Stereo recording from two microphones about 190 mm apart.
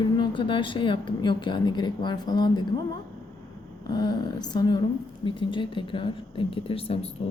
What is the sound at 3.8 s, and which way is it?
A woman's voice, 20° left (ahead or behind).